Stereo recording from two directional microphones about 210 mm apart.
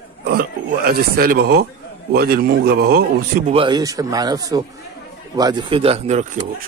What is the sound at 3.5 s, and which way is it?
Speech, 25° right (ahead or behind).